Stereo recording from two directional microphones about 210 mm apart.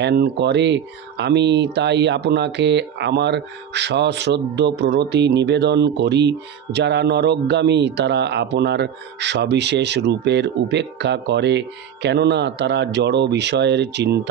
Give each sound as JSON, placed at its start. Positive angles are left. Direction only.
{"t": 0.0, "sound": "speech", "side_deg": -50}